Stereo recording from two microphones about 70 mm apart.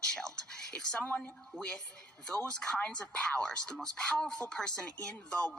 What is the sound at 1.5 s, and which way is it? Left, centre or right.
Speech, centre.